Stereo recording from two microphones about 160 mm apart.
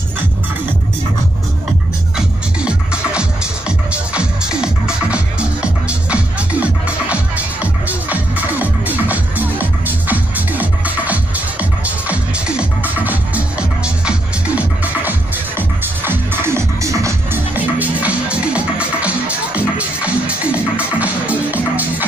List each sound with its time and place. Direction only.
2.1 s music: 5° right (ahead or behind)